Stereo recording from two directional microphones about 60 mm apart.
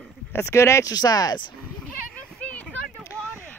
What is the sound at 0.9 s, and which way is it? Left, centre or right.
Speech, left.